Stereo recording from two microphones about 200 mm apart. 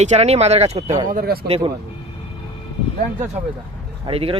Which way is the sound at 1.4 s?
30° right (ahead or behind).